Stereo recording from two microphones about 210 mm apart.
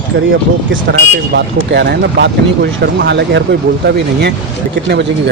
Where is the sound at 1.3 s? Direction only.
55° right (ahead or behind).